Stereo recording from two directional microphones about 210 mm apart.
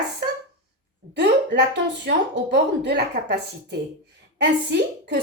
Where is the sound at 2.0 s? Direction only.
55° right (ahead or behind).